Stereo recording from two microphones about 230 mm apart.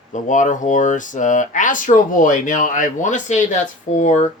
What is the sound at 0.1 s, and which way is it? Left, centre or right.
Speech, left.